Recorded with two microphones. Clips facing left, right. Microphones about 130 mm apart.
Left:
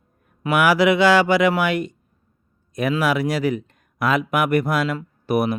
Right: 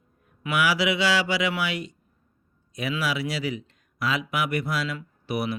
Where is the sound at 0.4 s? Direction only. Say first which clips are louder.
Left 7 dB; 50° left (ahead or behind).